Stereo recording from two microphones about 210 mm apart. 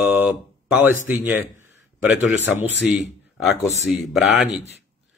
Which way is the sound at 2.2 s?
60° left (ahead or behind).